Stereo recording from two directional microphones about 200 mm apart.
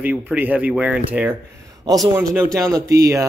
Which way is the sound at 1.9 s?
20° right (ahead or behind).